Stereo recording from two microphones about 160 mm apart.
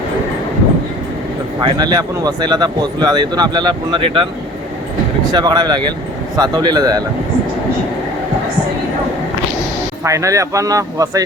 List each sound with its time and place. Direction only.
1.6 s speech: 25° right (ahead or behind)
5.3 s speech: 25° right (ahead or behind)
10.0 s speech: 20° right (ahead or behind)